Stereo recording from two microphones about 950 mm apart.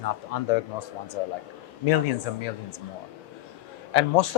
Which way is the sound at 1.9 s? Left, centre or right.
Left.